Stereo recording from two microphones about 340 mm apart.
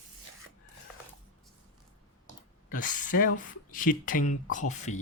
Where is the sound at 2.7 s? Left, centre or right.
Left.